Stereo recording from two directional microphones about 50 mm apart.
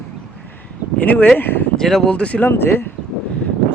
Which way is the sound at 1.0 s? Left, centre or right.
Left.